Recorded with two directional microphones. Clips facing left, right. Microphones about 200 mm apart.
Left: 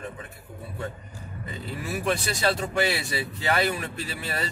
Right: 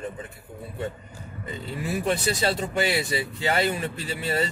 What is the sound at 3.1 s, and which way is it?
Speech, 25° right (ahead or behind).